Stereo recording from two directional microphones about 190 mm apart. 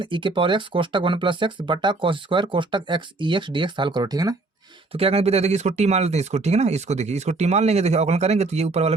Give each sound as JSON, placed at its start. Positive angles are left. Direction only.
{"t": 0.0, "sound": "speech", "side_deg": -25}
{"t": 4.9, "sound": "speech", "side_deg": -30}